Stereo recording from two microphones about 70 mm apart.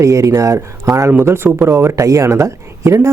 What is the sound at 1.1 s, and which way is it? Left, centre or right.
Speech, right.